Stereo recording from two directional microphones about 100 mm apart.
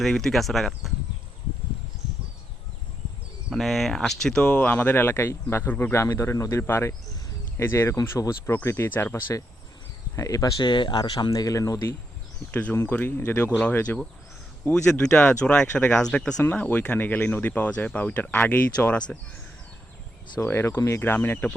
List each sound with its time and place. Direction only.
0.0 s speech: 5° left (ahead or behind)
3.5 s speech: centre (ahead or behind); by 9.1 s 20° left (ahead or behind)
10.2 s speech: 35° left (ahead or behind)
10.6 s speech: 50° left (ahead or behind); by 11.9 s 35° left (ahead or behind)
12.5 s speech: 15° left (ahead or behind)
16.4 s speech: 20° left (ahead or behind)
20.4 s speech: 25° left (ahead or behind)